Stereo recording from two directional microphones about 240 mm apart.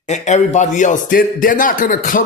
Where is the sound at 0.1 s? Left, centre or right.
Left.